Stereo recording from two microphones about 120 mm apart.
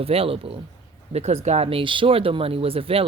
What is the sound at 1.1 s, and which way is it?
Speech, 65° right (ahead or behind).